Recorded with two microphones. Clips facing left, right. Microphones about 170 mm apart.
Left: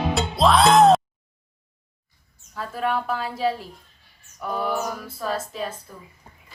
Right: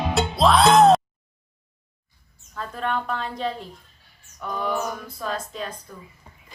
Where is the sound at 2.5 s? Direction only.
5° left (ahead or behind).